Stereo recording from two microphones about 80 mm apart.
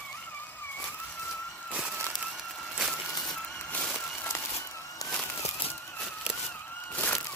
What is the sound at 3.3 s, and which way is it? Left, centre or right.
Music, centre.